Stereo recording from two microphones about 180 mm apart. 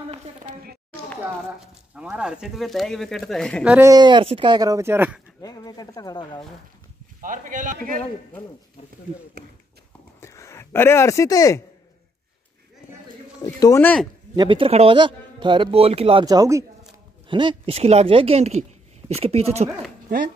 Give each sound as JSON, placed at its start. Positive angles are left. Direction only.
{"t": 2.0, "sound": "speech", "side_deg": -5}
{"t": 3.6, "sound": "speech", "side_deg": -10}
{"t": 3.9, "sound": "a man's voice", "side_deg": -25}
{"t": 5.4, "sound": "speech", "side_deg": 20}
{"t": 7.2, "sound": "a man's voice", "side_deg": -45}
{"t": 10.2, "sound": "speech", "side_deg": 15}
{"t": 13.4, "sound": "speech", "side_deg": 20}
{"t": 14.3, "sound": "a man's voice", "side_deg": -25}
{"t": 16.3, "sound": "speech", "side_deg": -20}